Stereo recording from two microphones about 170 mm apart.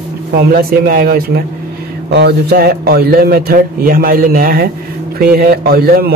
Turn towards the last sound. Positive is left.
turn(degrees=-65)  # may be behind; listen again after turning